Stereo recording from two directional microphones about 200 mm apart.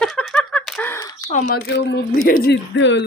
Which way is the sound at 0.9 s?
20° left (ahead or behind).